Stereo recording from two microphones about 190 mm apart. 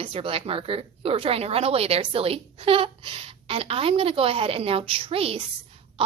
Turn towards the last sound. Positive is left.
turn(degrees=-30)  # may be behind; listen again after turning